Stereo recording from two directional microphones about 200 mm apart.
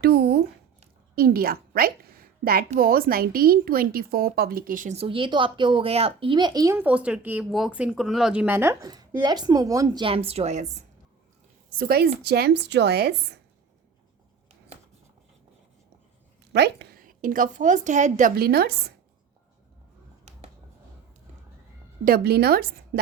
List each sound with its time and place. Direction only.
0.0 s a woman's voice: 50° right (ahead or behind)
1.7 s a sound: 50° right (ahead or behind)
2.7 s a woman's voice: 45° right (ahead or behind)
11.8 s a woman's voice: 50° right (ahead or behind)
16.6 s a woman's voice: 55° right (ahead or behind)
22.0 s a woman's voice: 50° right (ahead or behind)